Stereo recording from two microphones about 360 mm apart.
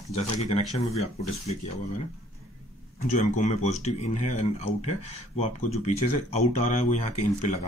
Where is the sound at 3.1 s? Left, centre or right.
Centre.